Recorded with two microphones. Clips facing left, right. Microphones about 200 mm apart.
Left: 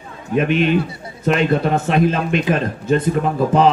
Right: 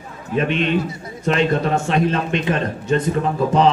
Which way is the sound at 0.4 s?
5° left (ahead or behind).